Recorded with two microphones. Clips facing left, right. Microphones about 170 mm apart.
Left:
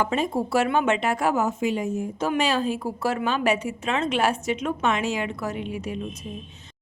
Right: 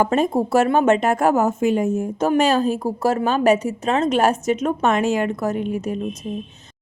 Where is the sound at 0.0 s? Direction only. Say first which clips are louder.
Right 6 dB; 45° right (ahead or behind).